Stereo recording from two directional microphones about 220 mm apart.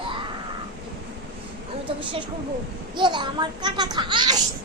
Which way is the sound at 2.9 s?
20° right (ahead or behind).